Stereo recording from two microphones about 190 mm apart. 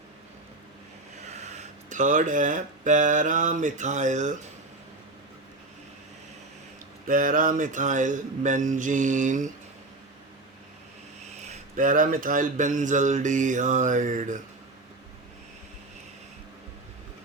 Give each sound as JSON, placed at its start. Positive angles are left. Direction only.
{"t": 1.3, "sound": "speech", "side_deg": -35}
{"t": 7.1, "sound": "speech", "side_deg": -45}
{"t": 11.4, "sound": "speech", "side_deg": -45}